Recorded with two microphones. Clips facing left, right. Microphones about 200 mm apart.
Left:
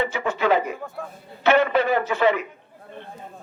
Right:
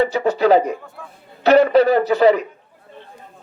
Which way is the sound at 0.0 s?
35° right (ahead or behind).